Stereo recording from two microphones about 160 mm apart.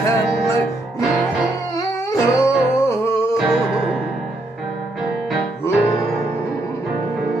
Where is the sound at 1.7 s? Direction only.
20° left (ahead or behind).